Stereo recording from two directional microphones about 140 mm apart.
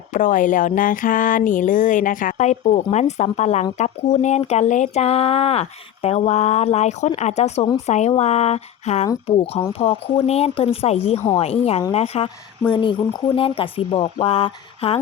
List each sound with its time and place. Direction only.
0.1 s a sound: 65° left (ahead or behind)
7.2 s speech: 55° left (ahead or behind)
12.7 s speech: 35° left (ahead or behind)